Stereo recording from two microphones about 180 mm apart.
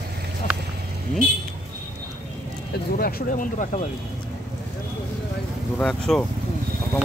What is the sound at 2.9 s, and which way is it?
Speech, 55° left (ahead or behind).